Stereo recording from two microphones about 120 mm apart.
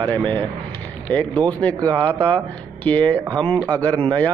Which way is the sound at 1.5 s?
10° left (ahead or behind).